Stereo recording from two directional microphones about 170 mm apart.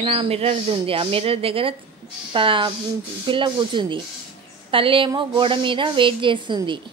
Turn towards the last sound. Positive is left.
turn(degrees=-30)  # may be behind; listen again after turning